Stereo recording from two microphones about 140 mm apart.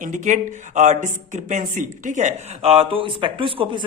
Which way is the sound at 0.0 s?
65° right (ahead or behind).